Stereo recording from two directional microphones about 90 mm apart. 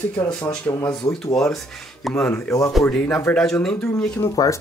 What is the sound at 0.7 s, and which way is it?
Speech, 45° left (ahead or behind).